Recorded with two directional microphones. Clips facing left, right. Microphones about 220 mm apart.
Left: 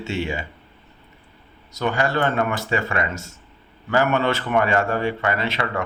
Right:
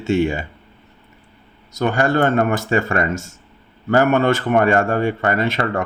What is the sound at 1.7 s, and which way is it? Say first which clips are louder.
A man's voice: right 4 dB; 50° right (ahead or behind).